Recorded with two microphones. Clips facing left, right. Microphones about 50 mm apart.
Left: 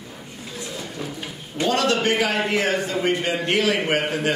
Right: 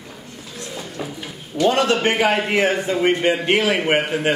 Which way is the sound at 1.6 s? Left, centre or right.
Right.